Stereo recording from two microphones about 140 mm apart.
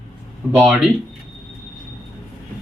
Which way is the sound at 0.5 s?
5° right (ahead or behind).